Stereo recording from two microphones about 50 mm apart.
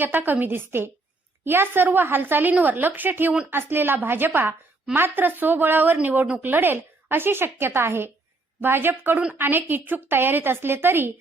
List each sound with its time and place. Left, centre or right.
0.0 s a woman's voice: right